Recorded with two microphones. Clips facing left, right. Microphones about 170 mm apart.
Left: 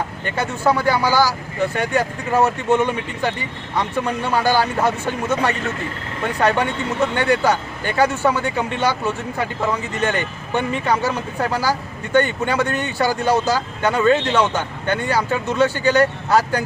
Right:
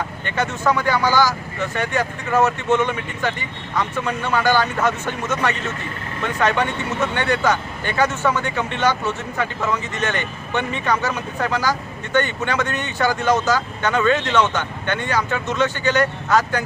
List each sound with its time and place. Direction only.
0.3 s speech: 10° left (ahead or behind)
14.0 s speech: 30° left (ahead or behind)
14.3 s speech: 10° left (ahead or behind)